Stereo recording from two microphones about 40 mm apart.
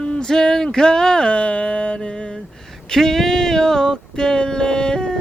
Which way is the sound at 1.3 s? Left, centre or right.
Left.